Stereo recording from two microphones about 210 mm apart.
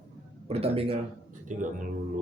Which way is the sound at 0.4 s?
30° right (ahead or behind).